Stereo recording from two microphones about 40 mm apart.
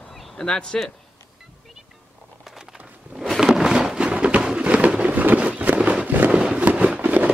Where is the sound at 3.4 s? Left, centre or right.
Centre.